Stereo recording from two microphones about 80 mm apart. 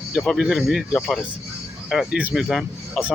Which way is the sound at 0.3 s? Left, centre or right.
Centre.